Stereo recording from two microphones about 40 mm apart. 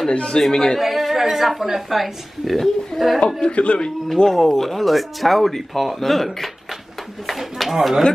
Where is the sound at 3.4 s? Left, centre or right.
Left.